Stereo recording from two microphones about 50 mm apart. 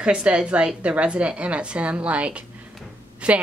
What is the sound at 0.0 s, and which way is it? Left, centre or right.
A woman's voice, right.